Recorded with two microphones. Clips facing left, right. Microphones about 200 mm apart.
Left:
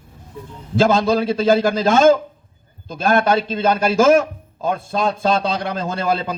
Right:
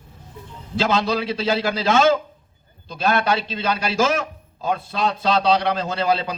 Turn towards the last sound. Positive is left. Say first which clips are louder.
# left 1 dB
turn(degrees=50)  # may be behind; listen again after turning